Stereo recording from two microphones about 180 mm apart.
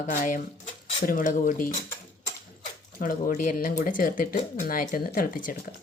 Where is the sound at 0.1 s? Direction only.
45° left (ahead or behind).